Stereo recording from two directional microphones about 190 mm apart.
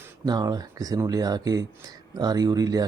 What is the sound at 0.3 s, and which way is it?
Speech, 20° right (ahead or behind).